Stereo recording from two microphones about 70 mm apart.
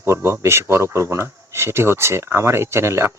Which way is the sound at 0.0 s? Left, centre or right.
Right.